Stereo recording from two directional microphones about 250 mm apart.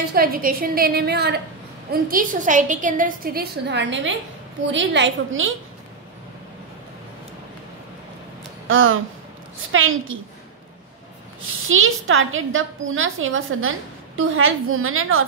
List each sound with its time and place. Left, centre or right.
0.1 s a woman's voice: right
8.6 s a sound: right
9.7 s a woman's voice: right
11.6 s a woman's voice: right